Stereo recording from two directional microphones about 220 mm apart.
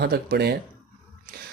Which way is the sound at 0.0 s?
45° right (ahead or behind).